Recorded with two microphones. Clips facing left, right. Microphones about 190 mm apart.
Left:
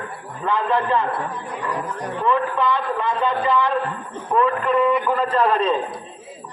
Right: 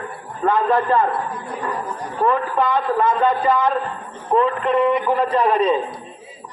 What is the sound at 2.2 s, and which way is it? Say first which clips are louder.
A man's voice: right 2 dB; 45° right (ahead or behind).